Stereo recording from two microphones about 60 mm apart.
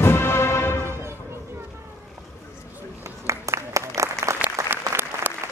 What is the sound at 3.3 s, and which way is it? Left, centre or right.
Applause, right.